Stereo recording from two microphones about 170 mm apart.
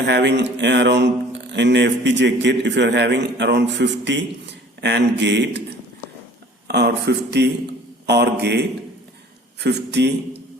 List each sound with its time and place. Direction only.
0.0 s a man's voice: 90° right
6.7 s a man's voice: 80° right
9.6 s a man's voice: 80° right